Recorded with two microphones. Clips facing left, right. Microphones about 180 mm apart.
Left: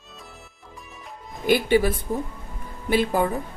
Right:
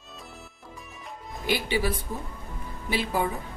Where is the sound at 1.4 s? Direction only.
50° left (ahead or behind).